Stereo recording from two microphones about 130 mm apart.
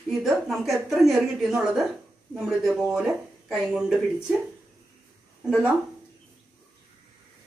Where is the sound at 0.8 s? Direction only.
Centre (ahead or behind).